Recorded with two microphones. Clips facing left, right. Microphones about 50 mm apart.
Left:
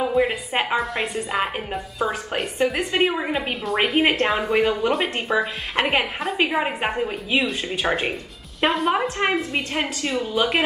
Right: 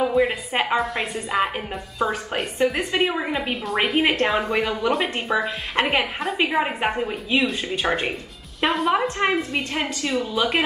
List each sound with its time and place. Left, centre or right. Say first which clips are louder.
0.0 s a woman's voice: right 1 dB; centre
9.8 s a woman's voice: right 1 dB; centre